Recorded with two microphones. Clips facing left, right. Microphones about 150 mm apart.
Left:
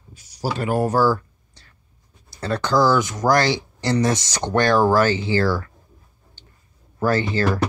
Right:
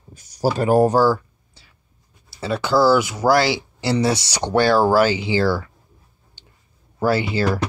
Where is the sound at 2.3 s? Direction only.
5° right (ahead or behind).